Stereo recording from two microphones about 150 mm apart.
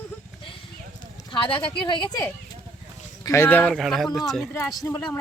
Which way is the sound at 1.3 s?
35° left (ahead or behind).